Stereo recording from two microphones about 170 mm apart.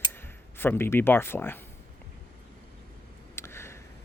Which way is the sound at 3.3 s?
15° left (ahead or behind).